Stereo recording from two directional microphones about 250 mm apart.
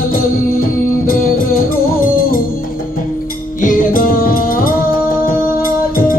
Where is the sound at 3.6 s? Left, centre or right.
Left.